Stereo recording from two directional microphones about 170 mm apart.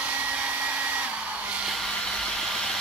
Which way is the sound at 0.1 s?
10° right (ahead or behind).